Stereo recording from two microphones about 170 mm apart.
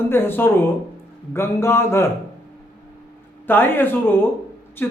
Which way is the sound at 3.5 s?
10° left (ahead or behind).